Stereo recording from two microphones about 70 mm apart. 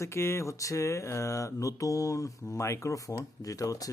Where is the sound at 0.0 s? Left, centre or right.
Left.